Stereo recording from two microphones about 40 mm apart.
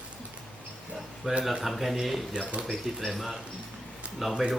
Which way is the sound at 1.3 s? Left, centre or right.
Centre.